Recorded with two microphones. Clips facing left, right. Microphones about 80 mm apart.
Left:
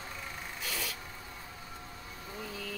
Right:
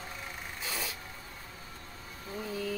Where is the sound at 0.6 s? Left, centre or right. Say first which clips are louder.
Right 1 dB; right.